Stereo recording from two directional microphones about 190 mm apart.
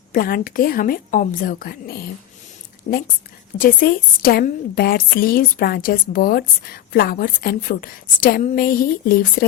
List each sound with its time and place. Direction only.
0.1 s a woman's voice: 50° left (ahead or behind)
3.6 s a woman's voice: 50° left (ahead or behind)